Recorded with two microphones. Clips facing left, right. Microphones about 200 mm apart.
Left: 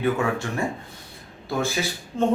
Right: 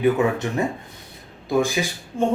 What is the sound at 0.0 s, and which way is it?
Speech, 20° right (ahead or behind).